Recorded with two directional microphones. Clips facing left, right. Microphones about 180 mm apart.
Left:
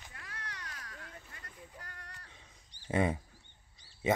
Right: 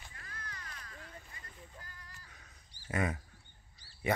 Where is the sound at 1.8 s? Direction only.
70° left (ahead or behind).